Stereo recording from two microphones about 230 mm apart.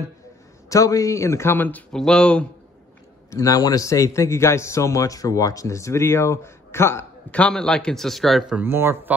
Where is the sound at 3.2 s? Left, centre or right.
Centre.